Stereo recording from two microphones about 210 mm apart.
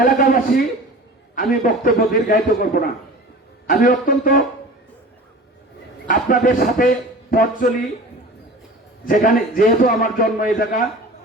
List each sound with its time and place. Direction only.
0.0 s a sound: 40° left (ahead or behind)
1.6 s a man's voice: 40° left (ahead or behind)
6.1 s a man's voice: 40° left (ahead or behind)
9.0 s a man's voice: 40° left (ahead or behind)